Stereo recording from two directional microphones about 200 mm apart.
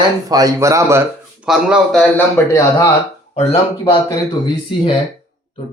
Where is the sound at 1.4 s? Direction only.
5° right (ahead or behind).